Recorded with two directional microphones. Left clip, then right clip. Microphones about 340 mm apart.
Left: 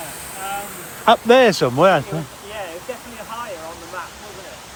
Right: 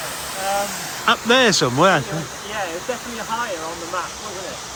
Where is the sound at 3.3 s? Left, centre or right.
Right.